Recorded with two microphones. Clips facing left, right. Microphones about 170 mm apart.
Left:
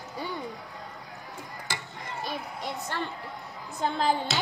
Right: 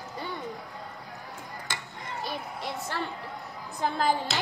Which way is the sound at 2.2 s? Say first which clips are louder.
Even; 5° right (ahead or behind).